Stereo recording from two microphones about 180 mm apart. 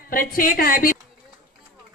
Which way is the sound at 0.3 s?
55° left (ahead or behind).